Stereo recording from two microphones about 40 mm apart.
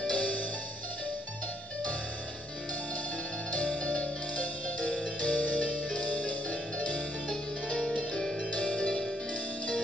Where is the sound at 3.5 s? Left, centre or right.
Left.